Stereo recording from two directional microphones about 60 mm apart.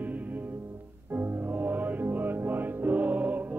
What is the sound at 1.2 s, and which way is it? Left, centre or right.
Music, right.